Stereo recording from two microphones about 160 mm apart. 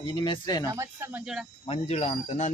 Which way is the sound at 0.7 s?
15° right (ahead or behind).